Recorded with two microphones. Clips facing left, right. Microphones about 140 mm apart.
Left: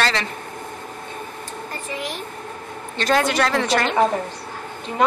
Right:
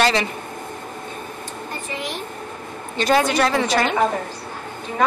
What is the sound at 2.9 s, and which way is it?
A woman's voice, 5° right (ahead or behind).